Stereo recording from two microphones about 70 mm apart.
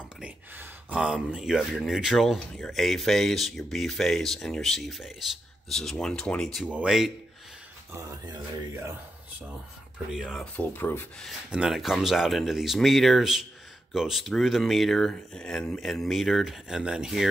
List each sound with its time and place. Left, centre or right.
0.9 s speech: centre
6.6 s speech: centre
10.1 s speech: centre
10.4 s speech: left
11.5 s speech: centre
15.8 s speech: centre